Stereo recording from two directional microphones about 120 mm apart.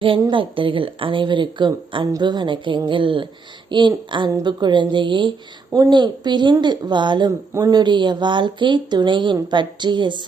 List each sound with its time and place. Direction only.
0.3 s speech: 45° right (ahead or behind)